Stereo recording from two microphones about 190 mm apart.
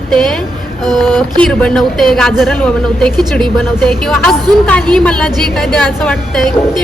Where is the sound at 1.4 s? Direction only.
5° left (ahead or behind).